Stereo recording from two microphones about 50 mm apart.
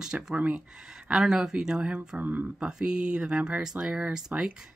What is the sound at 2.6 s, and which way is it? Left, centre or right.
Speech, centre.